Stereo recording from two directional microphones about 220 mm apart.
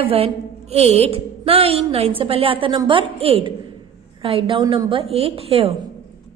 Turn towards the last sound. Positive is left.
turn(degrees=-25)  # may be behind; listen again after turning